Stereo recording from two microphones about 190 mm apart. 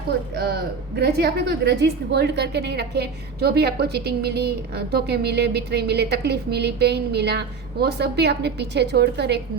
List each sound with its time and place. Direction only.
0.3 s a woman's voice: 60° right (ahead or behind)